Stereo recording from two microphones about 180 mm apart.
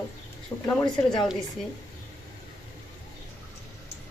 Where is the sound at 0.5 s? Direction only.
20° left (ahead or behind).